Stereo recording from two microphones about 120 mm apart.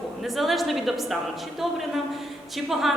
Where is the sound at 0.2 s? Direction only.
Centre (ahead or behind).